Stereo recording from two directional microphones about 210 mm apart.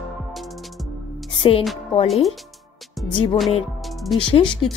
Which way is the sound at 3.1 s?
25° left (ahead or behind).